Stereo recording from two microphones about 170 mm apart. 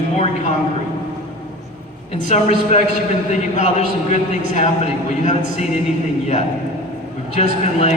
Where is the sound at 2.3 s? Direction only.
40° left (ahead or behind).